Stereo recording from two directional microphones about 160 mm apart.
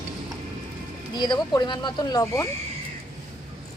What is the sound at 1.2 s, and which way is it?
Speech, 25° left (ahead or behind).